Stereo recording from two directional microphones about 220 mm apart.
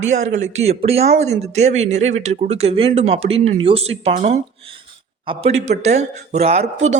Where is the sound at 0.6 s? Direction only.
30° right (ahead or behind).